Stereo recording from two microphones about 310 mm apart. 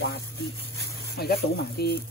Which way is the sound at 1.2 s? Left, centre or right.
Left.